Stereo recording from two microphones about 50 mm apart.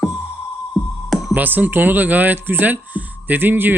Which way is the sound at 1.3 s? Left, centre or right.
Right.